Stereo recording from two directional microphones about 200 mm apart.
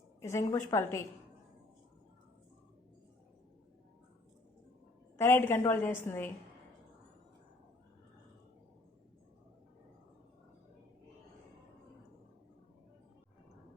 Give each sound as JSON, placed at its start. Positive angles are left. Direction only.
{"t": 0.2, "sound": "a woman's voice", "side_deg": 15}
{"t": 5.1, "sound": "a woman's voice", "side_deg": 10}